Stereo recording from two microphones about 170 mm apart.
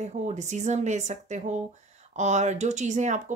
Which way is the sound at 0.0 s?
45° right (ahead or behind).